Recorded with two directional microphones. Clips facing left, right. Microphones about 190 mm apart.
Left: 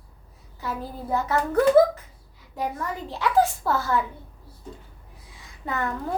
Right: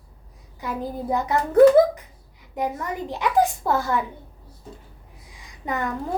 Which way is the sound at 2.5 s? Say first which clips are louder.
Right 3 dB; 20° right (ahead or behind).